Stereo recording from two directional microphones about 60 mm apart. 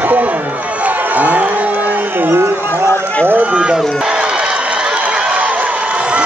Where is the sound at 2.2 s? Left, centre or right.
Right.